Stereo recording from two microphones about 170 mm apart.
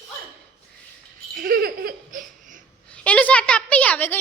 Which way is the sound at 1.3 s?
60° right (ahead or behind).